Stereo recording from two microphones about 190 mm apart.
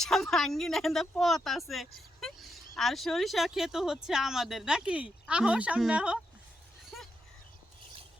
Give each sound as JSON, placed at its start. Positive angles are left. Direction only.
{"t": 0.0, "sound": "speech", "side_deg": 0}
{"t": 2.2, "sound": "a sound", "side_deg": 0}
{"t": 2.7, "sound": "speech", "side_deg": 0}